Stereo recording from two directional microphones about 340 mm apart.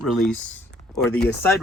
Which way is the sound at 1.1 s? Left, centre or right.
Left.